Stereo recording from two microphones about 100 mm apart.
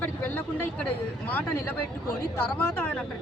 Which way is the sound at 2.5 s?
15° left (ahead or behind).